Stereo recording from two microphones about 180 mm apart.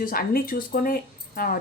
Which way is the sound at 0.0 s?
55° left (ahead or behind).